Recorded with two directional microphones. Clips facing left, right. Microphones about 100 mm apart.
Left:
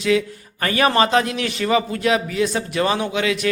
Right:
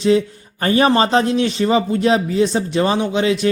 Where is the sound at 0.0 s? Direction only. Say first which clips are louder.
Right 4 dB; 30° right (ahead or behind).